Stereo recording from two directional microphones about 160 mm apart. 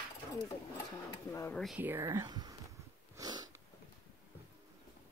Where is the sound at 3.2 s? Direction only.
25° right (ahead or behind).